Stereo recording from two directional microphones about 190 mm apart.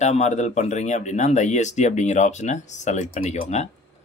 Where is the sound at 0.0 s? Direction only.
35° left (ahead or behind).